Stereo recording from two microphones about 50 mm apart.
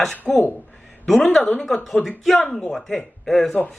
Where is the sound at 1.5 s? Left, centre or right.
Centre.